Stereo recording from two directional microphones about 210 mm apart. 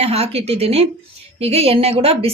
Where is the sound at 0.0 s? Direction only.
30° right (ahead or behind).